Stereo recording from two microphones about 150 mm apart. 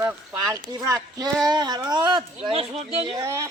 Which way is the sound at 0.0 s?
20° right (ahead or behind).